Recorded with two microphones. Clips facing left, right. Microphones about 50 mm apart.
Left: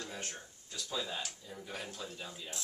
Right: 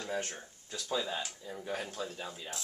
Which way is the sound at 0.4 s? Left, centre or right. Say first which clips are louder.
Right 3 dB; right.